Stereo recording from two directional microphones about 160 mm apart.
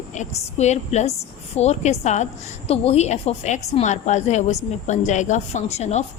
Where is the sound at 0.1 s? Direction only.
45° left (ahead or behind).